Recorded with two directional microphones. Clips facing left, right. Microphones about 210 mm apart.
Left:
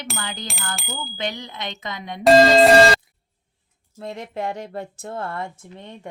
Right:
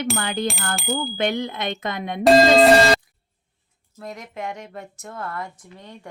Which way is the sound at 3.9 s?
25° left (ahead or behind).